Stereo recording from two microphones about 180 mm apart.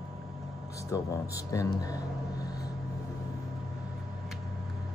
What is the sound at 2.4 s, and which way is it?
Vehicle, 20° left (ahead or behind).